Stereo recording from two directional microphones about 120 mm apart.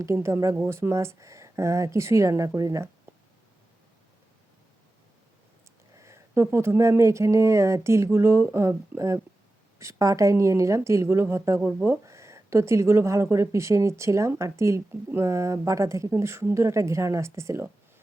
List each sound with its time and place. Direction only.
0.0 s speech: 25° right (ahead or behind)
6.0 s speech: 25° right (ahead or behind)